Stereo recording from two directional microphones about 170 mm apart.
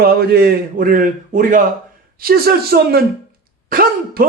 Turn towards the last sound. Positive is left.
turn(degrees=-60)  # may be behind; listen again after turning